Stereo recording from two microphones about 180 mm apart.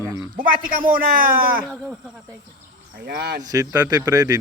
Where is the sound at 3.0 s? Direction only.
60° right (ahead or behind).